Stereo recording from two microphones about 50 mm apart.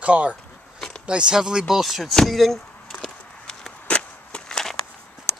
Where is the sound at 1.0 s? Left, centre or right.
Centre.